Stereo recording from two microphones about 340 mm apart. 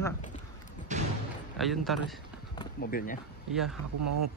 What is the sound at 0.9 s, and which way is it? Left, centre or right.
Thump, right.